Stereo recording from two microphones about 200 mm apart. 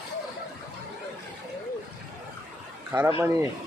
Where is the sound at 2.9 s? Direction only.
10° right (ahead or behind).